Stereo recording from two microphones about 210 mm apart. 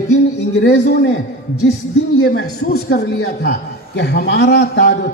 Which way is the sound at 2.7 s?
50° left (ahead or behind).